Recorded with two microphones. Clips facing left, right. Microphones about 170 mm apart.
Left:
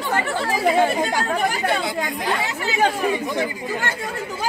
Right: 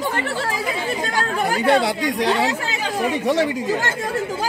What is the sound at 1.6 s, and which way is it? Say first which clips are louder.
A woman's voice: right 5 dB; 70° right (ahead or behind).